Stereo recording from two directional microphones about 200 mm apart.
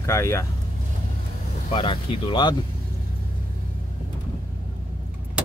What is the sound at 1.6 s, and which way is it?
Speech, 25° left (ahead or behind).